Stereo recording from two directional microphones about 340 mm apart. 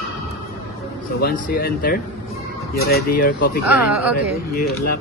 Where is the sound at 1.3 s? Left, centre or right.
Left.